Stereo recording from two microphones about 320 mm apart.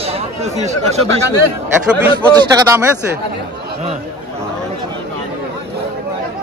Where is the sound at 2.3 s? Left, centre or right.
Centre.